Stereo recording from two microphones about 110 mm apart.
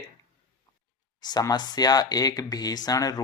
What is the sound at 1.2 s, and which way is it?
Speech, 35° left (ahead or behind).